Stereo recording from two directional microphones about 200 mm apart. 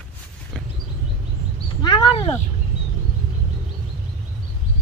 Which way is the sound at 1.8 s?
20° left (ahead or behind).